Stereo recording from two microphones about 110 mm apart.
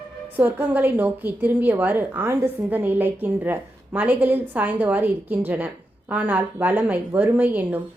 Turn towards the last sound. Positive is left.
turn(degrees=-15)  # may be behind; listen again after turning